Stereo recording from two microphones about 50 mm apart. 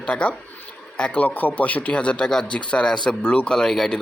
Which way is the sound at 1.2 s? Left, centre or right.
Left.